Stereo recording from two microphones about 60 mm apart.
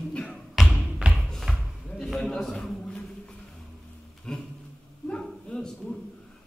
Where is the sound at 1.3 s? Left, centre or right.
Centre.